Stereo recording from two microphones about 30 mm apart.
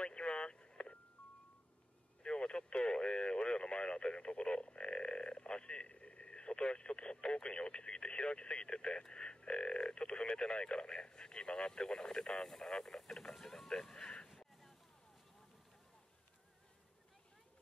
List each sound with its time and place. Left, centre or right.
0.0 s vehicle: left
2.2 s speech: left; by 14.1 s centre